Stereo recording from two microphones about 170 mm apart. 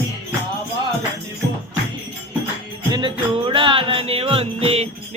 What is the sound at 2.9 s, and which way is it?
Music, 30° right (ahead or behind).